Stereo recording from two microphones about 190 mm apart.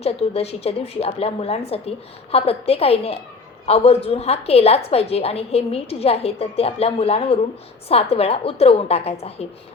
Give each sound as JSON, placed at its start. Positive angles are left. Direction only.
{"t": 0.0, "sound": "a woman's voice", "side_deg": 30}